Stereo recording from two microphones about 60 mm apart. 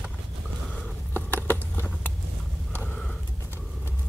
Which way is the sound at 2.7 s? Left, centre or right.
Left.